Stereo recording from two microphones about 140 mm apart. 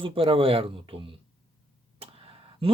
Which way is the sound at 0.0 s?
40° right (ahead or behind).